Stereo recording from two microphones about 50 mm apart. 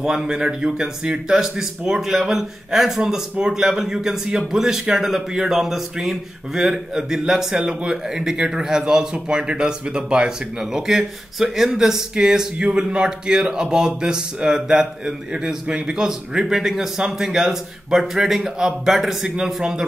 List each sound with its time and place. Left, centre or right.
0.0 s speech: centre